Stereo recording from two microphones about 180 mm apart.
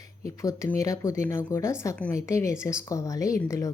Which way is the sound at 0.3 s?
15° left (ahead or behind).